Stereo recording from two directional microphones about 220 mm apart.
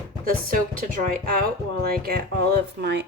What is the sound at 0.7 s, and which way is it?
Speech, 40° right (ahead or behind).